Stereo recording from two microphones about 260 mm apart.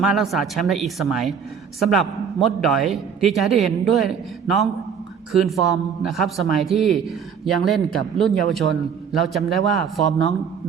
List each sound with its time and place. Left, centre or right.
0.0 s a man's voice: centre